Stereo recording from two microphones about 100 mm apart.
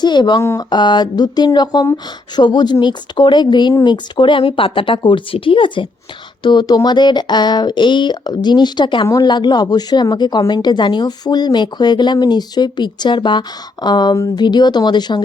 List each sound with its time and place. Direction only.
0.0 s a woman's voice: 50° left (ahead or behind)
6.4 s speech: 45° left (ahead or behind)